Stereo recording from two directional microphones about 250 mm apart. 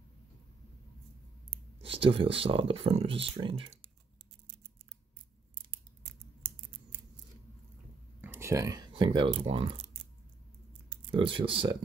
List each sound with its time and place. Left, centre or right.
1.8 s speech: right
8.2 s speech: centre
11.1 s speech: right